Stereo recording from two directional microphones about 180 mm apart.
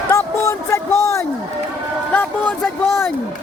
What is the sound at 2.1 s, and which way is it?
Speech, 10° left (ahead or behind).